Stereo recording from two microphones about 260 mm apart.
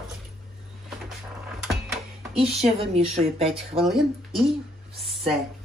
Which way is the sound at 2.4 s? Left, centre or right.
Right.